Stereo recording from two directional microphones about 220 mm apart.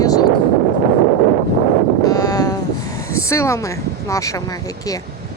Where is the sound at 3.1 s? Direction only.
15° left (ahead or behind).